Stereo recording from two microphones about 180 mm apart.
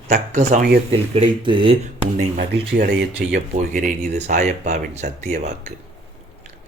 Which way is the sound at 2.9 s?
75° right (ahead or behind).